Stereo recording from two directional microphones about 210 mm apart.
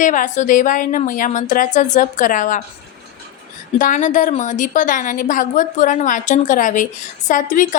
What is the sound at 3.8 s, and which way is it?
A woman's voice, 35° left (ahead or behind).